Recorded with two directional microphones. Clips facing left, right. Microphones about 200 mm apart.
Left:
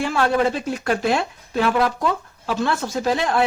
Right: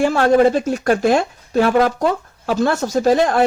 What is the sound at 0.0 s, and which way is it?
Speech, 45° right (ahead or behind).